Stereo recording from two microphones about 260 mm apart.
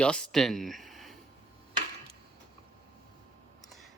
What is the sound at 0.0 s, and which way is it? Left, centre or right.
Speech, centre.